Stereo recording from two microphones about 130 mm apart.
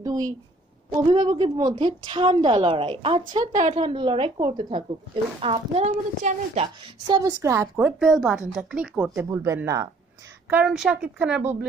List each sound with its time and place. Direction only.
0.0 s a woman's voice: 25° right (ahead or behind)
1.1 s a woman's voice: 40° right (ahead or behind)
5.4 s a woman's voice: 50° right (ahead or behind)
7.1 s a woman's voice: 30° right (ahead or behind)
8.0 s a woman's voice: centre (ahead or behind); by 9.8 s 25° right (ahead or behind)
10.5 s speech: 5° right (ahead or behind)